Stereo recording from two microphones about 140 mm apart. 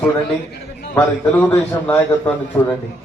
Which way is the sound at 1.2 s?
10° left (ahead or behind).